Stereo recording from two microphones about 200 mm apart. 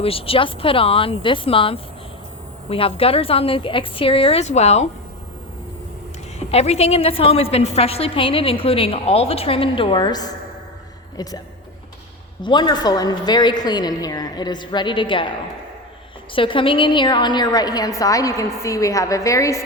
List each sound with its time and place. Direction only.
0.0 s a woman's voice: 30° left (ahead or behind)
6.5 s a woman's voice: 30° left (ahead or behind)
12.4 s a woman's voice: 20° left (ahead or behind)
16.3 s a woman's voice: 25° left (ahead or behind)